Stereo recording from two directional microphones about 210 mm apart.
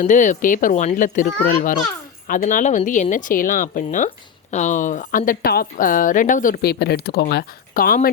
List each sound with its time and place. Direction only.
0.0 s a woman's voice: 35° left (ahead or behind)